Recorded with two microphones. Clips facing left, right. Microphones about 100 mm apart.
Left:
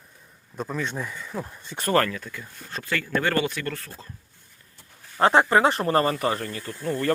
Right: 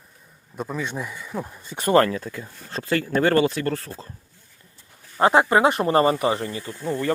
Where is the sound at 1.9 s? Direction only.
30° right (ahead or behind).